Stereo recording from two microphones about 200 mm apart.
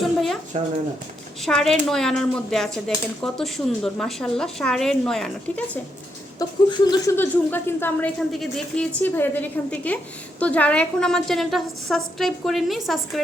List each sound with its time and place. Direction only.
0.0 s a sound: centre (ahead or behind)
0.5 s speech: 30° right (ahead or behind)
1.4 s a woman's voice: centre (ahead or behind)
6.4 s laughter: 20° left (ahead or behind)
7.2 s a woman's voice: 10° left (ahead or behind)